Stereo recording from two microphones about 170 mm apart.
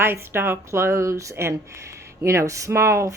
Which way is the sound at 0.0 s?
15° right (ahead or behind).